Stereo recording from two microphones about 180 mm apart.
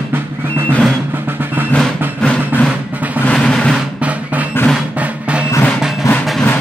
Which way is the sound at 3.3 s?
5° left (ahead or behind).